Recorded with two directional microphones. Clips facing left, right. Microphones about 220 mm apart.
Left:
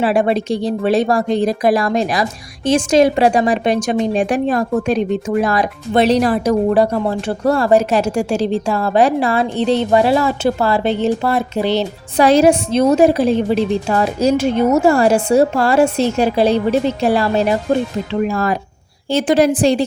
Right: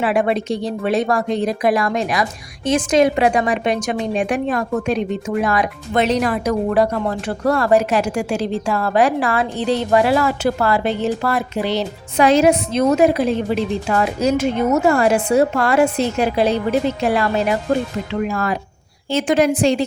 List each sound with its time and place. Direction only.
0.0 s a woman's voice: 30° left (ahead or behind)